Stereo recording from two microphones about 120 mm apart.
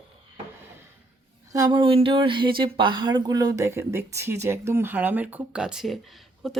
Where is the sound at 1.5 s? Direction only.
30° right (ahead or behind).